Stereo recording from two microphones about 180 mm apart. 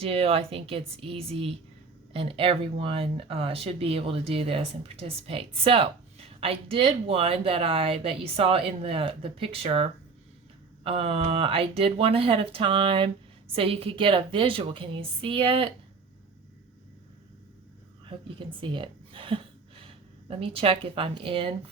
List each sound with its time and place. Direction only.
0.0 s a woman's voice: 35° right (ahead or behind)
18.0 s speech: 25° right (ahead or behind)